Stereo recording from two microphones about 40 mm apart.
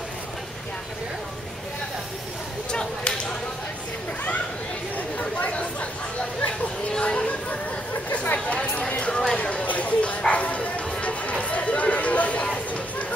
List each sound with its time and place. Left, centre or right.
2.7 s whip: left
5.5 s chatter: left
6.9 s a sound: left
8.1 s chatter: left
8.7 s a sound: left
10.2 s music: left